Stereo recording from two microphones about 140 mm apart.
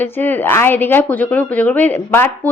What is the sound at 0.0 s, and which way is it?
A woman's voice, 15° left (ahead or behind).